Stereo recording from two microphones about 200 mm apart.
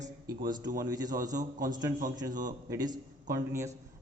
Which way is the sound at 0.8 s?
20° right (ahead or behind).